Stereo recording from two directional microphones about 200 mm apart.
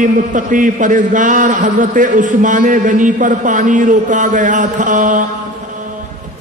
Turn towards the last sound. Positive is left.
turn(degrees=-40)  # may be behind; listen again after turning